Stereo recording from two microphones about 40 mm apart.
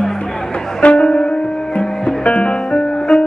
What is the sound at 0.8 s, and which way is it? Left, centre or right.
Music, left.